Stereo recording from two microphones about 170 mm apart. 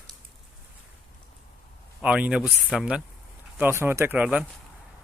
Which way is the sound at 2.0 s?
10° right (ahead or behind).